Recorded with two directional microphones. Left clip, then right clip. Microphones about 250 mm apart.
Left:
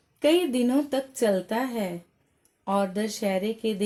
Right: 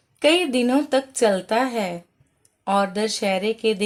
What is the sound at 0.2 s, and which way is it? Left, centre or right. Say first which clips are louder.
A woman's voice: right 4 dB; centre.